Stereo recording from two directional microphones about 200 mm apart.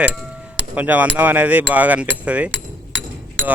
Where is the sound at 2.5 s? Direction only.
65° right (ahead or behind).